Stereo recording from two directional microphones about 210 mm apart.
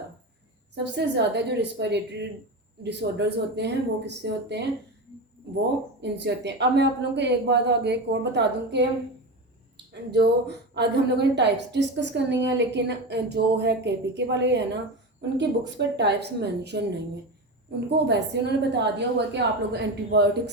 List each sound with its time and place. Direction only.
0.9 s a woman's voice: 55° right (ahead or behind)
3.0 s a woman's voice: 50° right (ahead or behind)
6.0 s a woman's voice: 55° right (ahead or behind)
10.1 s a woman's voice: 50° right (ahead or behind)